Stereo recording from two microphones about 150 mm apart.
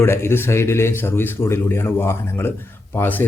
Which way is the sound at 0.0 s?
15° left (ahead or behind).